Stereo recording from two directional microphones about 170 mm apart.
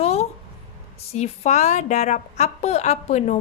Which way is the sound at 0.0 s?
40° left (ahead or behind).